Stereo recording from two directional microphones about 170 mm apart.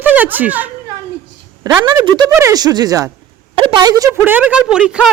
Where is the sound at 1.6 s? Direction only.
25° right (ahead or behind).